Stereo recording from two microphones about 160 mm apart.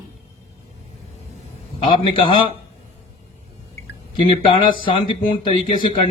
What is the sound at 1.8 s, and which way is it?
Speech, 30° left (ahead or behind).